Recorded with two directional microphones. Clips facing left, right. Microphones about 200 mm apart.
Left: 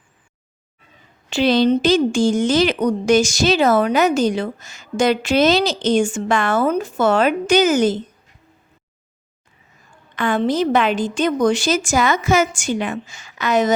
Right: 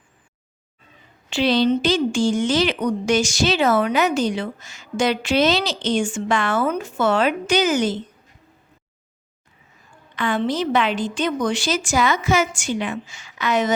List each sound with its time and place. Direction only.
1.3 s speech: 45° left (ahead or behind)
10.2 s speech: 45° left (ahead or behind)